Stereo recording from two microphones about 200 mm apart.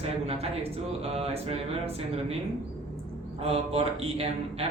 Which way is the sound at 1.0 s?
30° right (ahead or behind).